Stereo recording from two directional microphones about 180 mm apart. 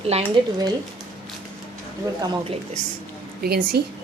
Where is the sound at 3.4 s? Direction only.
60° right (ahead or behind).